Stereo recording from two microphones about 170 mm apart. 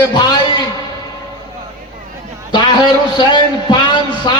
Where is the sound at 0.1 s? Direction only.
25° left (ahead or behind).